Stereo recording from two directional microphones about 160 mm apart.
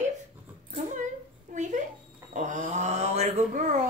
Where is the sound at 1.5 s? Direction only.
50° right (ahead or behind).